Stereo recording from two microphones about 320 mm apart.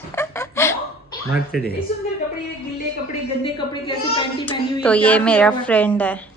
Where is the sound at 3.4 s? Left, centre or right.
Centre.